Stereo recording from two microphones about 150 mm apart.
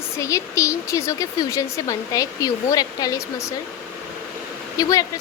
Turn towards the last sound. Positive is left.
turn(degrees=25)  # may be behind; listen again after turning